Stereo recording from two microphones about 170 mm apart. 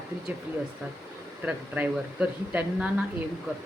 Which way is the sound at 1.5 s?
10° right (ahead or behind).